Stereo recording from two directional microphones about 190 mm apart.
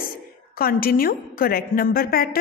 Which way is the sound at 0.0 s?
50° left (ahead or behind).